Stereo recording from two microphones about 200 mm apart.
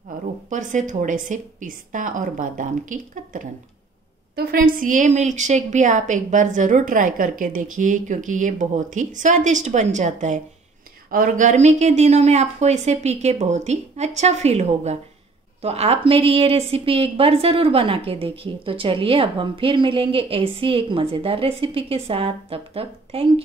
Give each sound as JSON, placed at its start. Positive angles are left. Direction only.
{"t": 0.5, "sound": "a woman's voice", "side_deg": -40}